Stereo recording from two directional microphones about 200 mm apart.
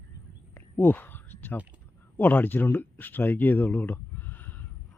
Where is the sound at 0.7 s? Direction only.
10° left (ahead or behind).